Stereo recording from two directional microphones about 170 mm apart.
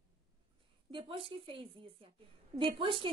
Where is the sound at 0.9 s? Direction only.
30° right (ahead or behind).